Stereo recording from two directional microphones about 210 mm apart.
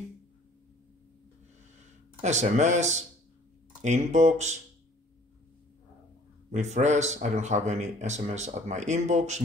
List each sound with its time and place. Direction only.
2.2 s speech: 35° right (ahead or behind)
6.5 s speech: 35° right (ahead or behind)